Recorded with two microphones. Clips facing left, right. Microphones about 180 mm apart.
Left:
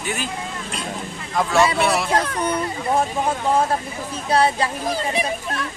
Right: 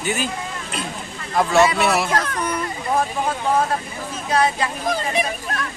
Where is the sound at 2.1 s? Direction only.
30° left (ahead or behind).